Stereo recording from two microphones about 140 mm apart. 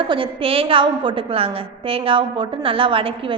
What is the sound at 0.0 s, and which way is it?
A woman's voice, 35° right (ahead or behind).